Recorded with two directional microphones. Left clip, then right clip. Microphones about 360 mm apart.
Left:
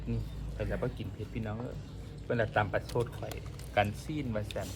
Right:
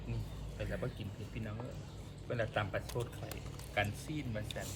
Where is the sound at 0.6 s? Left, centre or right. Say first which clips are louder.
Left 6 dB; centre.